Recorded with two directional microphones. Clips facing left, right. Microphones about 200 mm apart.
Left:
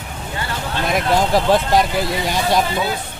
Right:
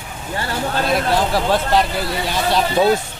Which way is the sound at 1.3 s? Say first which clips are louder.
Left 2 dB; 15° left (ahead or behind).